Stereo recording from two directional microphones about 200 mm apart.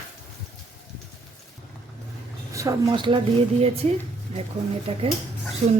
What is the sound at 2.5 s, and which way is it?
A woman's voice, 20° right (ahead or behind).